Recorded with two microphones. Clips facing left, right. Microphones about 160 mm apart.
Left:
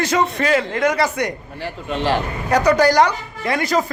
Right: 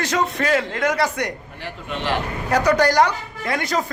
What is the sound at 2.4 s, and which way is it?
Speech, centre (ahead or behind).